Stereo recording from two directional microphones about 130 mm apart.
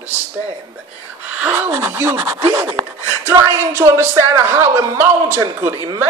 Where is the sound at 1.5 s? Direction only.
20° right (ahead or behind).